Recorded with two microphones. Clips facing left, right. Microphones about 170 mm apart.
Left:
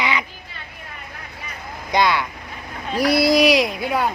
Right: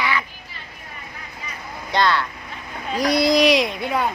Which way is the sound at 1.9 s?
10° left (ahead or behind).